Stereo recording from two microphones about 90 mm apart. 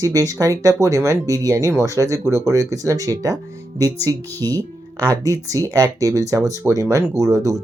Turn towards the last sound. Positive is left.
turn(degrees=-35)  # may be behind; listen again after turning